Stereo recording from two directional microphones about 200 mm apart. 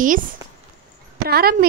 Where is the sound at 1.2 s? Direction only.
50° right (ahead or behind).